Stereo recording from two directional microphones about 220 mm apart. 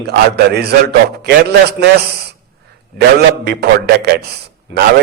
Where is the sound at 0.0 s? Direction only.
45° right (ahead or behind).